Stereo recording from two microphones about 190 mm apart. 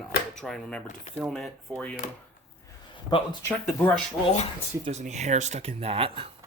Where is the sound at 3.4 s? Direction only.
10° left (ahead or behind).